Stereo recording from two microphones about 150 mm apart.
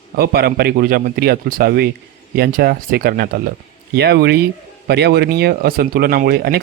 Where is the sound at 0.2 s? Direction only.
90° right.